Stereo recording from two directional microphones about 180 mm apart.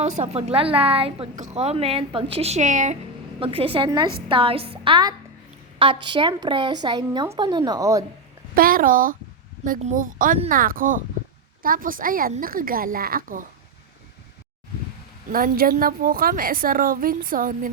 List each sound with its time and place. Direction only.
0.0 s a woman's voice: 40° right (ahead or behind)
3.4 s a woman's voice: 30° right (ahead or behind)
3.8 s speech: 20° right (ahead or behind)
8.5 s a woman's voice: 55° right (ahead or behind)
15.3 s a woman's voice: 55° right (ahead or behind)